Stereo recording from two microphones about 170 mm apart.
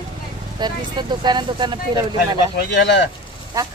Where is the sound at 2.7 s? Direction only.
90° left.